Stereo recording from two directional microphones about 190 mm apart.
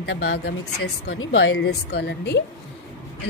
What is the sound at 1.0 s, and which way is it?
A woman's voice, 90° left.